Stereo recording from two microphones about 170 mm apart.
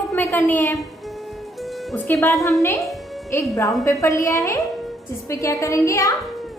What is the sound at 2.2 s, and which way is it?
A woman's voice, 20° left (ahead or behind).